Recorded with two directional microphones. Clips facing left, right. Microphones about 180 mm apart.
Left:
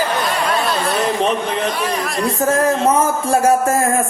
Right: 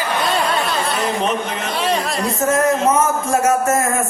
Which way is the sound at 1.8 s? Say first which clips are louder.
Even; 25° right (ahead or behind).